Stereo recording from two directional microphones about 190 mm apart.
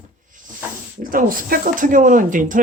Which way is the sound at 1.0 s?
45° right (ahead or behind).